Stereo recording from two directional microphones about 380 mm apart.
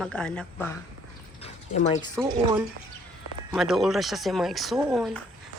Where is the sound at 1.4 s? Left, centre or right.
Centre.